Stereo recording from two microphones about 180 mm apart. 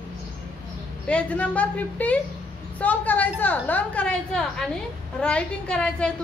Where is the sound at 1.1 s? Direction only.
5° left (ahead or behind).